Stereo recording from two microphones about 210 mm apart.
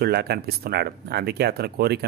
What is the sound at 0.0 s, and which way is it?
A man's voice, 50° right (ahead or behind).